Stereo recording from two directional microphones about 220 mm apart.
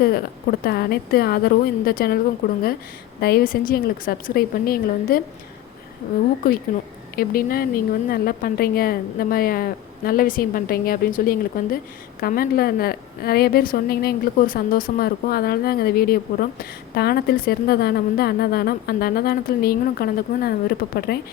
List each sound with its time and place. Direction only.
0.6 s a woman's voice: 45° left (ahead or behind)
6.4 s a woman's voice: 40° left (ahead or behind)